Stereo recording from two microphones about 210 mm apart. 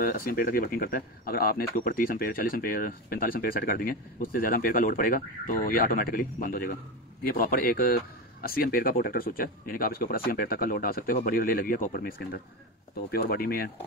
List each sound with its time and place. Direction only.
0.0 s speech: 45° left (ahead or behind)